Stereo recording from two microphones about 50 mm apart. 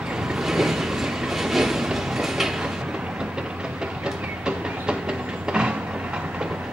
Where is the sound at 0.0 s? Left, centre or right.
Centre.